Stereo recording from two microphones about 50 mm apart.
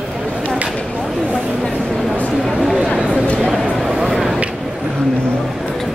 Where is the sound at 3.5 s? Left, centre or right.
Centre.